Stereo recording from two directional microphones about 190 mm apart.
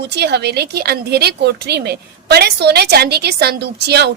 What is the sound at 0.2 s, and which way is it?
A woman's voice, 60° right (ahead or behind).